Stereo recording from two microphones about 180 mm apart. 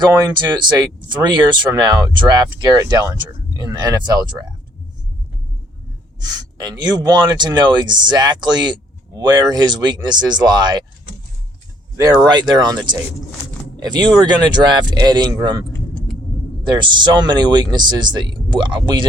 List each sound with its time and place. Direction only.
0.0 s speech: 25° right (ahead or behind)
6.1 s speech: 20° right (ahead or behind)
11.9 s speech: 20° right (ahead or behind)
16.6 s speech: 25° right (ahead or behind)